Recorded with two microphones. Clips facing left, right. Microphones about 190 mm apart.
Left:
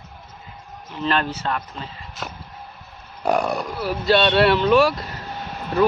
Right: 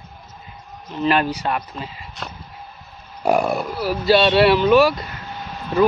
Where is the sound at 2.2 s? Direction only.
Centre (ahead or behind).